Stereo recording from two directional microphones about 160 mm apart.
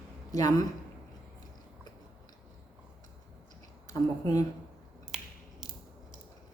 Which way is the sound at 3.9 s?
25° left (ahead or behind).